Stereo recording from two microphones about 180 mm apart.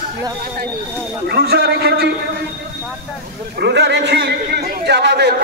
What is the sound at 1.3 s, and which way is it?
Speech, 65° right (ahead or behind).